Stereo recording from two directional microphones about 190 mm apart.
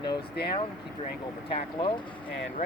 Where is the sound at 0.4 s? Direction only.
55° left (ahead or behind).